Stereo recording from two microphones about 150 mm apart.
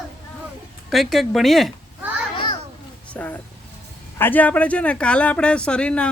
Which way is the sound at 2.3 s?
30° left (ahead or behind).